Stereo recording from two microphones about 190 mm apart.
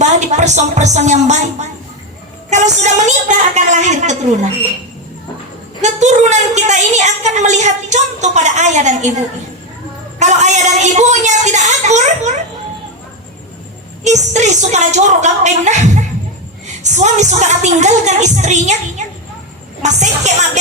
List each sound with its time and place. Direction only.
0.0 s a woman's voice: 40° right (ahead or behind)
5.8 s a woman's voice: 40° right (ahead or behind)
14.0 s a woman's voice: 40° right (ahead or behind)